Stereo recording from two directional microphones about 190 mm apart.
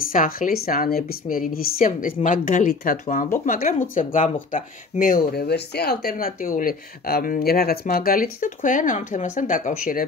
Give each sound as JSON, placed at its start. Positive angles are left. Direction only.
{"t": 0.0, "sound": "speech", "side_deg": 45}